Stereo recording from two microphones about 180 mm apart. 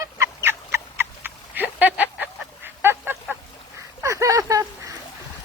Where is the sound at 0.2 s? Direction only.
15° right (ahead or behind).